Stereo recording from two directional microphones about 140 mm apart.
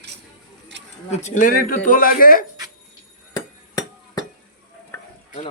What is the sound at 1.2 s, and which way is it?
Speech, 65° left (ahead or behind).